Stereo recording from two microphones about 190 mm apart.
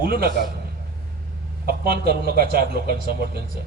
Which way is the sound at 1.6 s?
55° right (ahead or behind).